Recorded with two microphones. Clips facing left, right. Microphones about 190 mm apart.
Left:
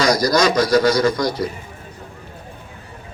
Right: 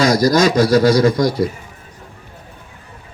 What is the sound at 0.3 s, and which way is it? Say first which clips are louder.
Speech: right 3 dB; 45° right (ahead or behind).